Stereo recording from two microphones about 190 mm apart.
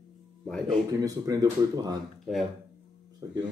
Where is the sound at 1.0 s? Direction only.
20° right (ahead or behind).